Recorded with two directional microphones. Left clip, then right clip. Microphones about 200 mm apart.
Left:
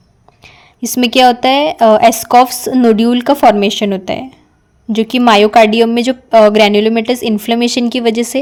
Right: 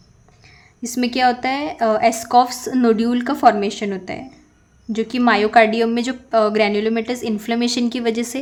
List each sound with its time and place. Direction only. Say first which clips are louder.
0.8 s a woman's voice: left 9 dB; 35° left (ahead or behind)